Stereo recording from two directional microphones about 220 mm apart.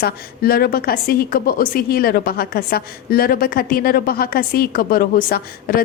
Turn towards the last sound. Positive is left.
turn(degrees=40)  # may be behind; listen again after turning